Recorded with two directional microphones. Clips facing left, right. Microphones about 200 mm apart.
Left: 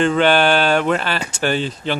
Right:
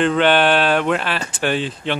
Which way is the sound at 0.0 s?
Centre (ahead or behind).